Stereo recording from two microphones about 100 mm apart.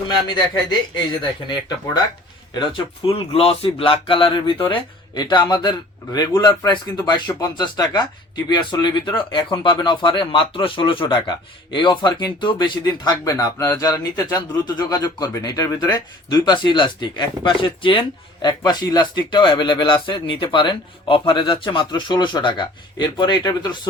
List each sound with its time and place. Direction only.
1.2 s speech: 45° left (ahead or behind)
3.1 s speech: 75° left (ahead or behind); by 18.0 s 60° left (ahead or behind)
18.4 s speech: 45° left (ahead or behind)